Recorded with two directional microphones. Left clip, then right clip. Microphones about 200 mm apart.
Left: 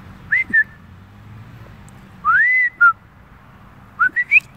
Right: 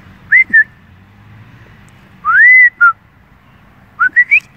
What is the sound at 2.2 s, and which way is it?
Whistling, 5° right (ahead or behind).